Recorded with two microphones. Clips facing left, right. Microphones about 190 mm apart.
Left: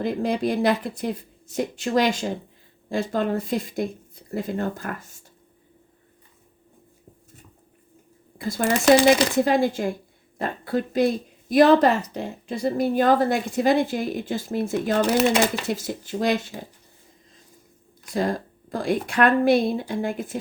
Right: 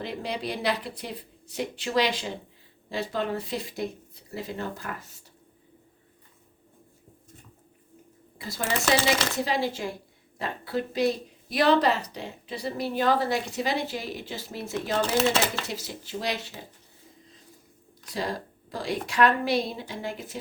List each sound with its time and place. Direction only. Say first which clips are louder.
0.0 s a woman's voice: left 9 dB; 45° left (ahead or behind)
8.4 s speech: left 9 dB; 50° left (ahead or behind)
8.6 s speech: left 8 dB; 15° left (ahead or behind)
9.4 s a woman's voice: left 7 dB; 50° left (ahead or behind)
15.0 s speech: left 4 dB; 15° left (ahead or behind)
15.6 s a woman's voice: left 8 dB; 50° left (ahead or behind)
18.0 s a woman's voice: left 7 dB; 50° left (ahead or behind)